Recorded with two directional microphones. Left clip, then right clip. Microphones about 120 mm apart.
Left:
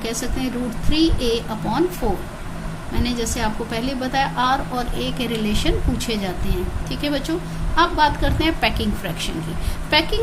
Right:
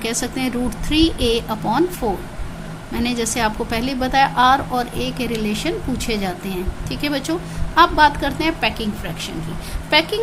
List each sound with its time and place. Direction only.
0.0 s a woman's voice: 40° right (ahead or behind); by 6.1 s 15° right (ahead or behind)
6.1 s a woman's voice: 30° right (ahead or behind)
8.6 s a woman's voice: centre (ahead or behind)
9.9 s a woman's voice: 20° right (ahead or behind)